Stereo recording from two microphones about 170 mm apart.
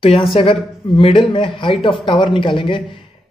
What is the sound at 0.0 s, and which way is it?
Speech, 35° left (ahead or behind).